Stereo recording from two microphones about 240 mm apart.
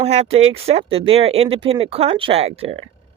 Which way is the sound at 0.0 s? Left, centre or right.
Right.